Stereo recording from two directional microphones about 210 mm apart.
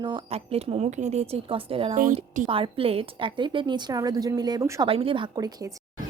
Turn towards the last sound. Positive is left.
turn(degrees=-20)  # may be behind; listen again after turning